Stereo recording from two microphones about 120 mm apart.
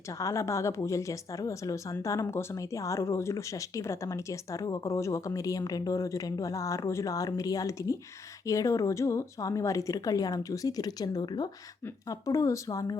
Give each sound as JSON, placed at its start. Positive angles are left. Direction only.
{"t": 0.2, "sound": "speech", "side_deg": 25}